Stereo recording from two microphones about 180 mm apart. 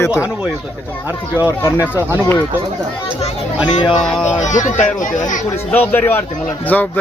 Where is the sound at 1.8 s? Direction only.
10° right (ahead or behind).